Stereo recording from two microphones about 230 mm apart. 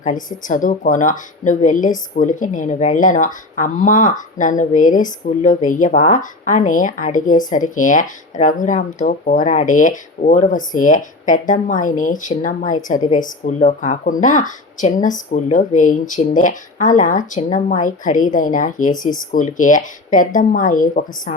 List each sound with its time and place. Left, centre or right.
0.0 s speech: left